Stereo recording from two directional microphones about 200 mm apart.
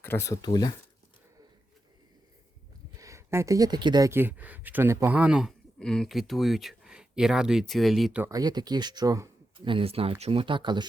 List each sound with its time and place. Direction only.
0.0 s speech: 10° left (ahead or behind)
3.0 s speech: 15° right (ahead or behind)
8.3 s speech: 20° right (ahead or behind)